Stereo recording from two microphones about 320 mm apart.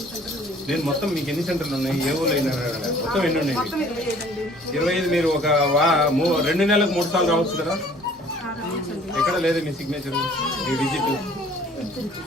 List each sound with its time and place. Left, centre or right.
0.7 s a man's voice: centre
4.7 s a man's voice: centre
9.1 s bird: centre